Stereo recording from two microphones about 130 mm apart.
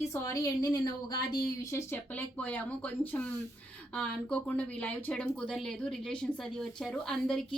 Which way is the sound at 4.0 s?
10° left (ahead or behind).